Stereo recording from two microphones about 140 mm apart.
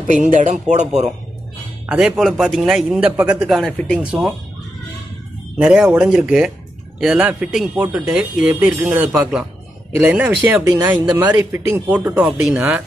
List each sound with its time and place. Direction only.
0.0 s speech: 60° right (ahead or behind)
1.9 s a man's voice: 5° right (ahead or behind)
5.6 s a man's voice: 5° right (ahead or behind)
10.2 s speech: 15° right (ahead or behind)